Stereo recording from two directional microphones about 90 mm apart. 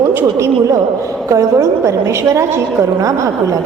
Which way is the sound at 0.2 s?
35° right (ahead or behind).